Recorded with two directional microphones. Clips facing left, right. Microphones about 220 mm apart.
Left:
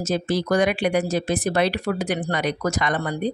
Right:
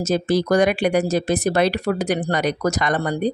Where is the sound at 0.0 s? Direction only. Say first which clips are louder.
Right 4 dB; 40° right (ahead or behind).